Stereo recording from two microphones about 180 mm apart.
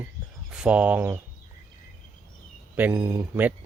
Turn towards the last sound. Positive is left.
turn(degrees=-15)  # may be behind; listen again after turning